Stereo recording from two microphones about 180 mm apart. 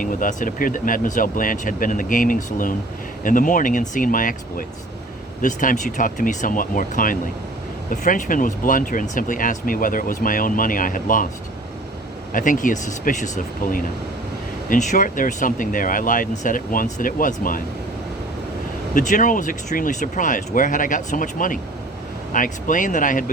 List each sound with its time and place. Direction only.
0.0 s speech: 50° left (ahead or behind)
12.3 s speech: 45° left (ahead or behind)
18.9 s speech: 45° left (ahead or behind)